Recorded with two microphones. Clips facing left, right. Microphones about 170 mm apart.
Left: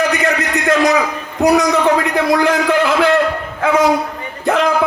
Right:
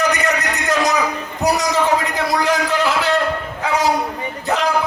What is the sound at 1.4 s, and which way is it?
Speech, 55° left (ahead or behind).